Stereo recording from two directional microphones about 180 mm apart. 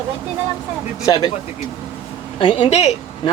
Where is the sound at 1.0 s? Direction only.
20° left (ahead or behind).